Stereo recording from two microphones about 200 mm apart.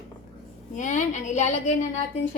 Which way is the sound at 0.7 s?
40° left (ahead or behind).